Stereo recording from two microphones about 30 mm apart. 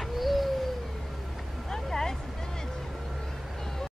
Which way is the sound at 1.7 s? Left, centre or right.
Centre.